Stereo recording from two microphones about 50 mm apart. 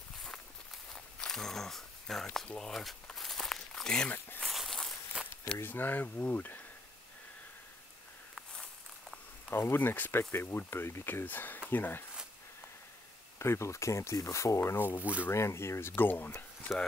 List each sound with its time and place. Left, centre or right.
0.9 s walk: centre
2.4 s speech: centre
2.7 s speech: centre
3.2 s walk: centre
4.4 s a sound: centre
5.2 s speech: centre
5.6 s speech: left
9.5 s speech: left
11.2 s speech: left
13.4 s speech: left
15.0 s speech: right
15.3 s speech: left
16.0 s speech: left